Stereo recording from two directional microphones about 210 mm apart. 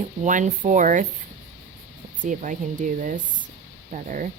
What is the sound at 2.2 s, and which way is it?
Speech, 35° right (ahead or behind).